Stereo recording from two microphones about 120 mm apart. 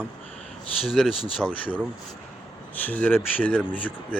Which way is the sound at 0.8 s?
Centre (ahead or behind).